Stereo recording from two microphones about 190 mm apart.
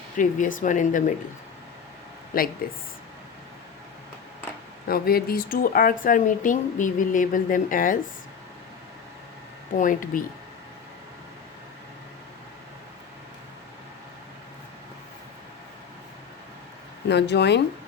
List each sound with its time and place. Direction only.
0.2 s speech: 45° left (ahead or behind)
2.3 s speech: 50° left (ahead or behind)
4.9 s speech: 50° left (ahead or behind)
9.7 s speech: 45° left (ahead or behind)
17.1 s speech: 65° left (ahead or behind)